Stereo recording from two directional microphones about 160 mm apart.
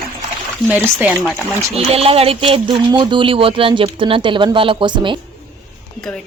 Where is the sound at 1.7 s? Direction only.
40° right (ahead or behind).